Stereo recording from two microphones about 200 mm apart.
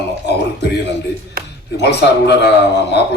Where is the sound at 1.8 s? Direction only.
60° left (ahead or behind).